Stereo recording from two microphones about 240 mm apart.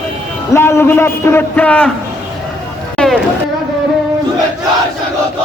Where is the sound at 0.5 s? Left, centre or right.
Centre.